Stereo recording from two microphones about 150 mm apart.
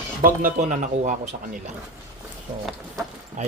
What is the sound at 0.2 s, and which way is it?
Speech, 65° right (ahead or behind).